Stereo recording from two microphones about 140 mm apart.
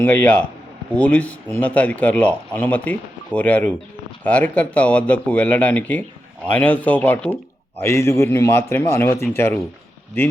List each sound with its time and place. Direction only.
0.0 s a man's voice: 10° left (ahead or behind)